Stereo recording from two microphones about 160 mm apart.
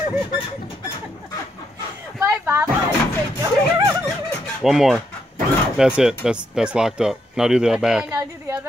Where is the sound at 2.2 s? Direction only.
15° right (ahead or behind).